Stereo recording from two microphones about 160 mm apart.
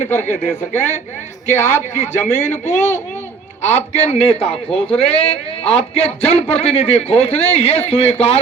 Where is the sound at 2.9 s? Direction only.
15° left (ahead or behind).